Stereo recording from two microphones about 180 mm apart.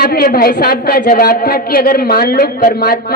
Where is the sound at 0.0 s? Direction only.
55° left (ahead or behind).